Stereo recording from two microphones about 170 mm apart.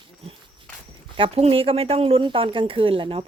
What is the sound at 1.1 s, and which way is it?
Speech, 35° right (ahead or behind).